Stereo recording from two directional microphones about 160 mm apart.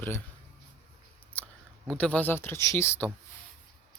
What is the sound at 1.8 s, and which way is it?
Speech, 5° left (ahead or behind).